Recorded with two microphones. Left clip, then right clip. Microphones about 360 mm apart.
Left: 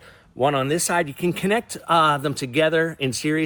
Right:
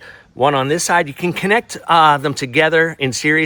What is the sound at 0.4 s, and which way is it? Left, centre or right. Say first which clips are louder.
Speech: right 6 dB; right.